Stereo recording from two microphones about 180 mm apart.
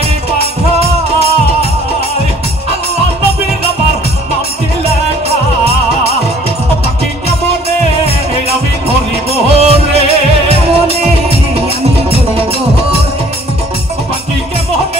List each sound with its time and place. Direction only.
9.3 s music: 35° right (ahead or behind)